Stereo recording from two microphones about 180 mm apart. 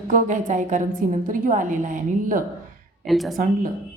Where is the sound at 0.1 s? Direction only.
45° right (ahead or behind).